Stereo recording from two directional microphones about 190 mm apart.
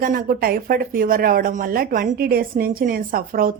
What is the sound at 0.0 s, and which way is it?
Speech, 50° right (ahead or behind).